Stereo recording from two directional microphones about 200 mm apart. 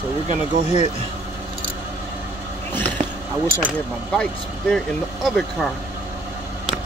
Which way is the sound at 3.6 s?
5° left (ahead or behind).